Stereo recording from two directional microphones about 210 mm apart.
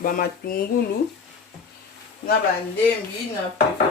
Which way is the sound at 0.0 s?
45° left (ahead or behind).